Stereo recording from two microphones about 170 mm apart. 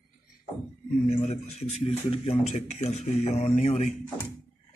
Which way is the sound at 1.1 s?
40° left (ahead or behind).